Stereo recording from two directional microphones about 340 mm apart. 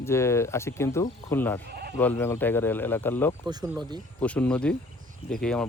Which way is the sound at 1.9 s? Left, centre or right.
Centre.